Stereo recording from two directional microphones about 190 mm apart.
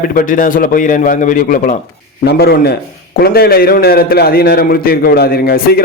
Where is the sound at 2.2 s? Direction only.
55° left (ahead or behind).